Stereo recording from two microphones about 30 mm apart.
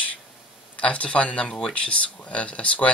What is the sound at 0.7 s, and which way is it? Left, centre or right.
Speech, left.